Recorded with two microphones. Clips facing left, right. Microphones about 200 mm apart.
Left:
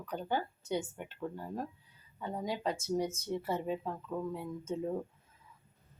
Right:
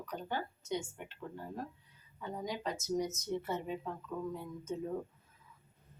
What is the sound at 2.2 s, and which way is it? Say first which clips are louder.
Speech: left 3 dB; 30° left (ahead or behind).